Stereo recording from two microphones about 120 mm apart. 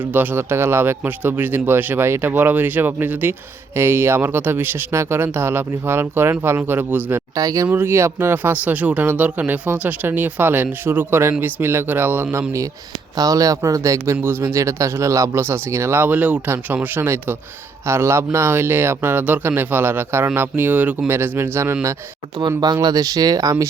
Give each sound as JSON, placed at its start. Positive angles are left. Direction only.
{"t": 0.0, "sound": "speech", "side_deg": -15}
{"t": 7.3, "sound": "speech", "side_deg": -30}
{"t": 7.7, "sound": "speech", "side_deg": -20}
{"t": 22.4, "sound": "speech", "side_deg": -35}